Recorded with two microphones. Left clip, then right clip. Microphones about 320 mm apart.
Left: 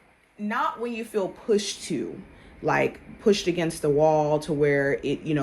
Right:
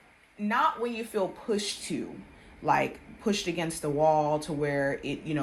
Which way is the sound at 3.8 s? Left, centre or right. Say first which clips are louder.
Left 4 dB; centre.